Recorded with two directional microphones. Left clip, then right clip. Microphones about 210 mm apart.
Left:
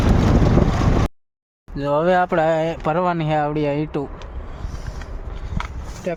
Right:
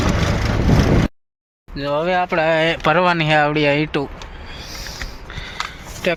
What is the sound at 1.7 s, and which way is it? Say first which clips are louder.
Speech: left 1 dB; 20° left (ahead or behind).